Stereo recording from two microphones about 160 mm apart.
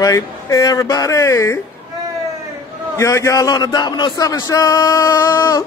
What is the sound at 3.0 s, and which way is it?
A woman's voice, 20° left (ahead or behind).